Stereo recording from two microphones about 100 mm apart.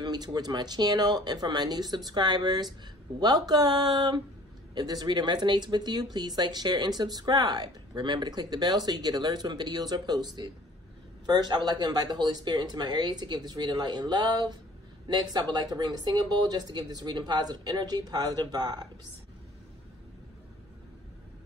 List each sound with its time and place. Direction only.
0.0 s speech: 45° right (ahead or behind)